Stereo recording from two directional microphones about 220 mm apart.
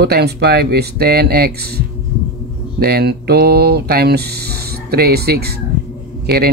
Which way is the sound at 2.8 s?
45° right (ahead or behind).